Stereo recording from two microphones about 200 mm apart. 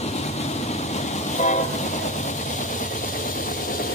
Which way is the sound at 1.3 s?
35° left (ahead or behind).